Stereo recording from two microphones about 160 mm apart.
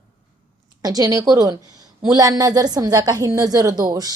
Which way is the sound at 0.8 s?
25° right (ahead or behind).